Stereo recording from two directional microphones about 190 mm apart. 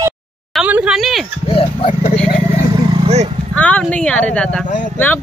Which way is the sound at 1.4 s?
30° left (ahead or behind).